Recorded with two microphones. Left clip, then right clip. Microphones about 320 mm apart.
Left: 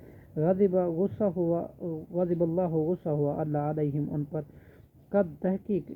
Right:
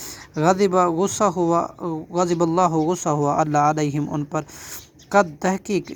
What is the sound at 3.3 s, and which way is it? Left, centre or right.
Speech, right.